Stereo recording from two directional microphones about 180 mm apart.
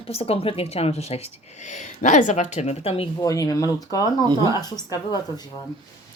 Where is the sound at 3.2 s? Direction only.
20° left (ahead or behind).